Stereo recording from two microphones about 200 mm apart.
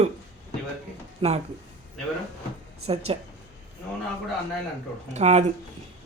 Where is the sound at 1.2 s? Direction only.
30° right (ahead or behind).